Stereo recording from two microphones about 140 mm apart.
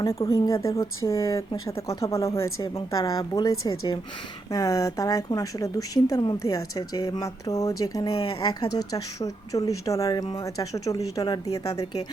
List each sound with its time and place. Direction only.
0.0 s a woman's voice: 25° left (ahead or behind)